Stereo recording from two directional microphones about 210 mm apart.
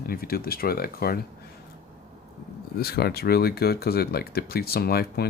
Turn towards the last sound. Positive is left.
turn(degrees=45)  # may be behind; listen again after turning